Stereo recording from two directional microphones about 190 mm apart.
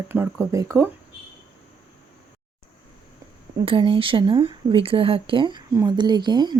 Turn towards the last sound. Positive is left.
turn(degrees=-25)  # may be behind; listen again after turning